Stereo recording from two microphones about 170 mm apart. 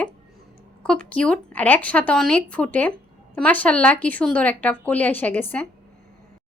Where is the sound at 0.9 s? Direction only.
5° left (ahead or behind).